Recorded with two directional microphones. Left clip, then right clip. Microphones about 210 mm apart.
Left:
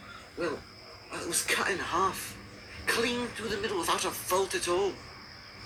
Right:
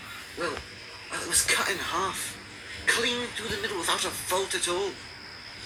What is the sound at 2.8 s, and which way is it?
A man's voice, 15° left (ahead or behind).